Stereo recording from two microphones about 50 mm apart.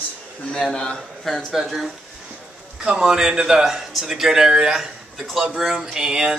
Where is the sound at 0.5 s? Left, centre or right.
Centre.